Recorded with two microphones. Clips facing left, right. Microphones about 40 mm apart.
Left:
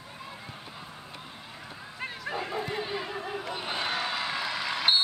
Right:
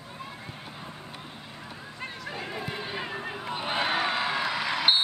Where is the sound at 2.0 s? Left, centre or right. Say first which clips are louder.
Left 3 dB; centre.